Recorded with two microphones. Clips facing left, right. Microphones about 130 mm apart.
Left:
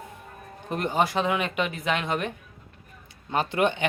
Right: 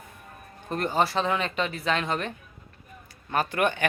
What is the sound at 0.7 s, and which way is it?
Speech, 15° left (ahead or behind).